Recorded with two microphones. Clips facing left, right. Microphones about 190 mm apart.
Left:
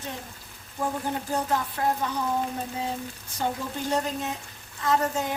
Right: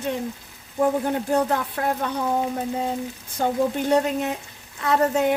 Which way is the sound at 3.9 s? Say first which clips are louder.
Right 7 dB; 65° right (ahead or behind).